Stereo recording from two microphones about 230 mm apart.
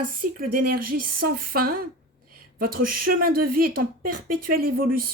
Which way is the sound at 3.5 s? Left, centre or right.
Right.